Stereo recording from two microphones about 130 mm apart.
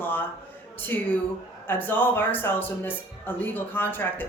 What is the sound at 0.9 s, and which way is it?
Speech, 15° left (ahead or behind).